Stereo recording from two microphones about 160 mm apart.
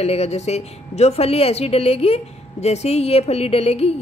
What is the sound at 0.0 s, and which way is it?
A woman's voice, 40° left (ahead or behind).